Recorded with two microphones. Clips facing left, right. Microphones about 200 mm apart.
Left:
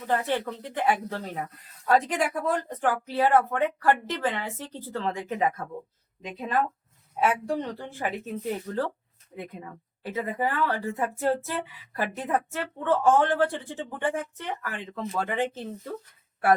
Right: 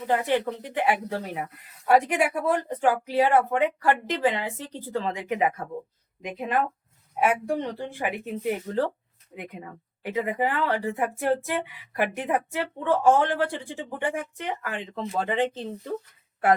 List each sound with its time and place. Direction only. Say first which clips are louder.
0.3 s a woman's voice: right 4 dB; 15° right (ahead or behind)